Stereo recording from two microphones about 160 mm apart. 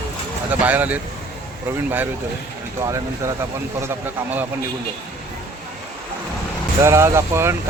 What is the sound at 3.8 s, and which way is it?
Speech, 10° right (ahead or behind).